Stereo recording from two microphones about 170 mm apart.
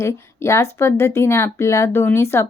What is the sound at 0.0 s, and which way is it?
Speech, 15° left (ahead or behind).